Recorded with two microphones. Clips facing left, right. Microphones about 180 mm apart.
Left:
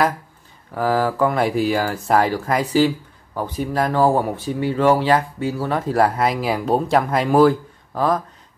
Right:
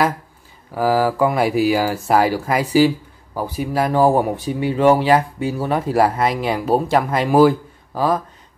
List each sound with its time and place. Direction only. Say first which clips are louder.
0.7 s speech: right 2 dB; 5° right (ahead or behind)